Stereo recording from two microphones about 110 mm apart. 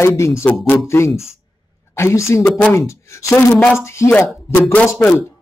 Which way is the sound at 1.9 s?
25° left (ahead or behind).